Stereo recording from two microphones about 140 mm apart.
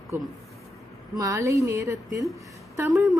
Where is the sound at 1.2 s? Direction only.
25° right (ahead or behind).